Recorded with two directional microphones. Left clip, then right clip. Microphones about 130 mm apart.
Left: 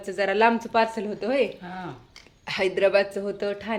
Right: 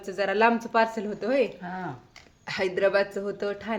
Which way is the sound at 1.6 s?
40° right (ahead or behind).